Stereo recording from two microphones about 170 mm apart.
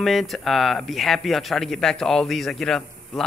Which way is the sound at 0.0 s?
Centre (ahead or behind).